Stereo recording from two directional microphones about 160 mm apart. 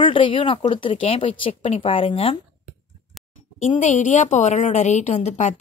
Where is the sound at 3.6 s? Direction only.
50° left (ahead or behind).